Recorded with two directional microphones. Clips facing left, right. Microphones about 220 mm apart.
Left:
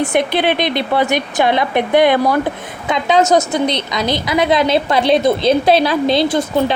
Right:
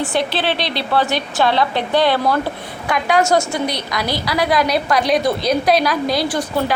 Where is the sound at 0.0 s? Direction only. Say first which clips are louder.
Left 4 dB; 20° left (ahead or behind).